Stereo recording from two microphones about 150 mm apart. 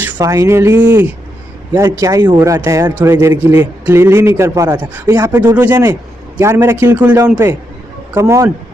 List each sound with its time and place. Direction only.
0.0 s a man's voice: 20° right (ahead or behind)
1.7 s a man's voice: 25° right (ahead or behind)